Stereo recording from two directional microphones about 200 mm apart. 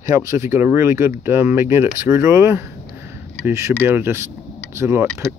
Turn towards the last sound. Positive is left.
turn(degrees=-15)  # may be behind; listen again after turning